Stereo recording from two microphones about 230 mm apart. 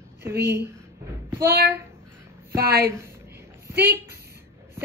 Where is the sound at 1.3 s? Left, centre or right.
Centre.